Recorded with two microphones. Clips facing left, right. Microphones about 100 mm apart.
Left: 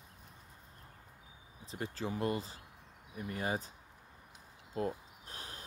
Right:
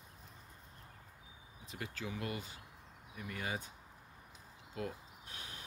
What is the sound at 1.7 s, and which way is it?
Speech, 35° left (ahead or behind).